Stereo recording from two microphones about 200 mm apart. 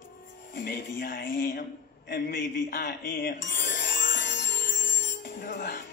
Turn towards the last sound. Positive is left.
turn(degrees=45)  # may be behind; listen again after turning